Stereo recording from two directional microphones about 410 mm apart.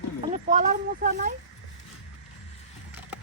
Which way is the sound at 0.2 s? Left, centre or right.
Centre.